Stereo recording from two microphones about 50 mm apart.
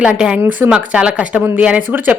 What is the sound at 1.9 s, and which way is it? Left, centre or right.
Speech, right.